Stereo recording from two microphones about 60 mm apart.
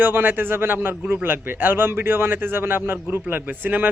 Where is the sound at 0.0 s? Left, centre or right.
Right.